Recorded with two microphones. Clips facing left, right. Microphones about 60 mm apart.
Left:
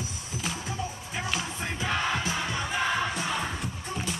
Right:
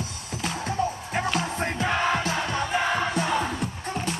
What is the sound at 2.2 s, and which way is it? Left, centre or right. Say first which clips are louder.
Music: right 4 dB; right.